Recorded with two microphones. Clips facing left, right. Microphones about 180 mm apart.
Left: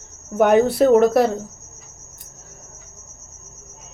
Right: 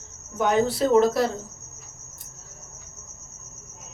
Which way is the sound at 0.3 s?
60° left (ahead or behind).